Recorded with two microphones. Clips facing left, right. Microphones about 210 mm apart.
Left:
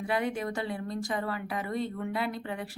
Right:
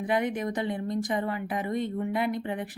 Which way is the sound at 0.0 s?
20° right (ahead or behind).